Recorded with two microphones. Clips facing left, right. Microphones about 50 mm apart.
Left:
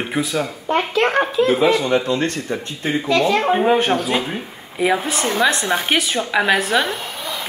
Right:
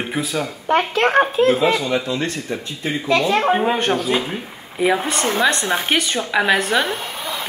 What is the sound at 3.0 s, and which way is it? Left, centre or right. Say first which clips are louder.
Speech: even; right.